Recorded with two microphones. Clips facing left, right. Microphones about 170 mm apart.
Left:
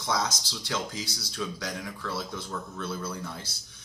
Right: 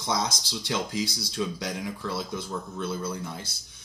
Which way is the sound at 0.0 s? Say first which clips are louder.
Right 1 dB; 20° right (ahead or behind).